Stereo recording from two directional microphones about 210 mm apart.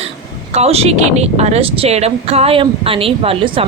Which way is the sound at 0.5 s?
30° right (ahead or behind).